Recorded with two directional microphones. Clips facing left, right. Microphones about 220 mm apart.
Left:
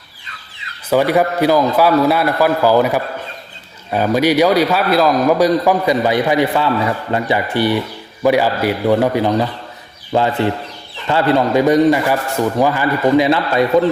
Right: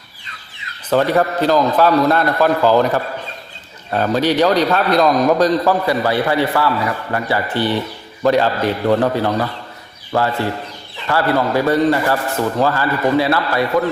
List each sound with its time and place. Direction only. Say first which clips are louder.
0.9 s a man's voice: left 1 dB; 10° left (ahead or behind)